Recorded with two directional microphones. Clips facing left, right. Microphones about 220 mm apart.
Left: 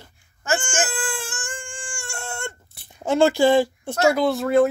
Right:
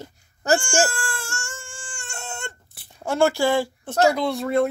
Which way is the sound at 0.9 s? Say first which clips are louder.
Left 2 dB; 20° left (ahead or behind).